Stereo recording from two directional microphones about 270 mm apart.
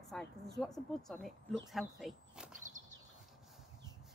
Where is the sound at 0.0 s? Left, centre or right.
Centre.